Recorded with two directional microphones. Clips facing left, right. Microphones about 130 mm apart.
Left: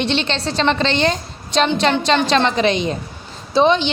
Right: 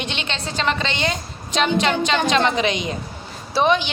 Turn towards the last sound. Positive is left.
turn(degrees=25)  # may be behind; listen again after turning